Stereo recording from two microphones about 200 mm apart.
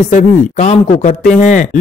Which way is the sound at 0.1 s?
35° left (ahead or behind).